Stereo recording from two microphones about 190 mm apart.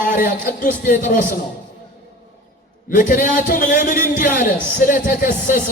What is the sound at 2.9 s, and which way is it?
Speech, 45° left (ahead or behind).